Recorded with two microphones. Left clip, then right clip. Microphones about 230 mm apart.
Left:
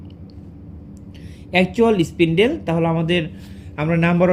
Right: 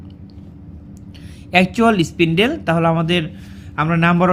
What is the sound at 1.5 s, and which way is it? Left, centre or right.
A man's voice, right.